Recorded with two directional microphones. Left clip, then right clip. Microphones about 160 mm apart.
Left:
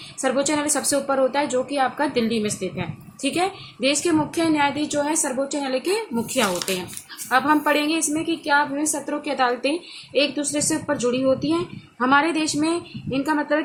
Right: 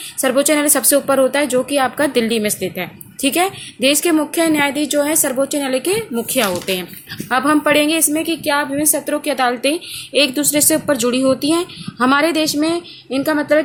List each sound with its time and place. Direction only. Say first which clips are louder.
0.2 s a woman's voice: right 7 dB; 50° right (ahead or behind)